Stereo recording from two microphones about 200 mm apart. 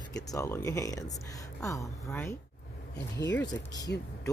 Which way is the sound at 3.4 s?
15° left (ahead or behind).